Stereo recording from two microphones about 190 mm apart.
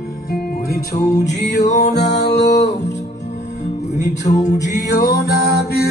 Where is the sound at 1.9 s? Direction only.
65° left (ahead or behind).